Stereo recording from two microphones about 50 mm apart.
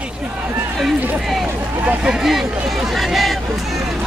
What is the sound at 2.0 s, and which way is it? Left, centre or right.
Speech, centre.